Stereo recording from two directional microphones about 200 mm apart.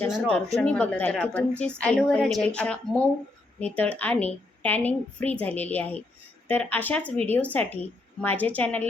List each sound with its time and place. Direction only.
0.0 s a woman's voice: 5° left (ahead or behind)